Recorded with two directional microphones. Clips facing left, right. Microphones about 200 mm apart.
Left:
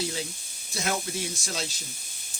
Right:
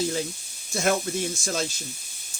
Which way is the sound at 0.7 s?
50° right (ahead or behind).